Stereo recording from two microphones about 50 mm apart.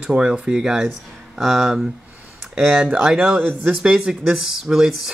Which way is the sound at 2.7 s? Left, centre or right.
Right.